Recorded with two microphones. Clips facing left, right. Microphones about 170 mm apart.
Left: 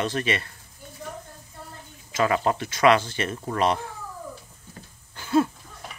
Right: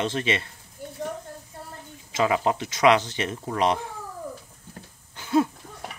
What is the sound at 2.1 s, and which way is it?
Speech, 15° right (ahead or behind).